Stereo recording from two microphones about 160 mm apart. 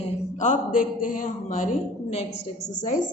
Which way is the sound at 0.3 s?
50° left (ahead or behind).